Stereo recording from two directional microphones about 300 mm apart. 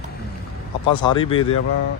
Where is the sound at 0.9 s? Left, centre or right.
Centre.